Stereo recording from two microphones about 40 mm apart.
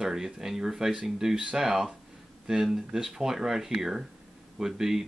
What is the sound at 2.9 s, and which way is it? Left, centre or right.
A man's voice, centre.